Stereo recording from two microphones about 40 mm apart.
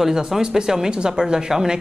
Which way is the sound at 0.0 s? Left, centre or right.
Centre.